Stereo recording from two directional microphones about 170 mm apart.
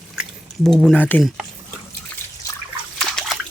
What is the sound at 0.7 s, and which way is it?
Speech, centre (ahead or behind).